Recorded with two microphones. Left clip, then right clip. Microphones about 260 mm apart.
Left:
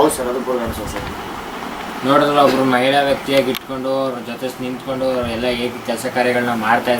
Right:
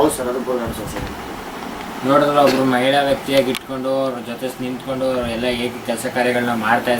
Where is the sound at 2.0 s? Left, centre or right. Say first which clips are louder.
Left 1 dB; centre.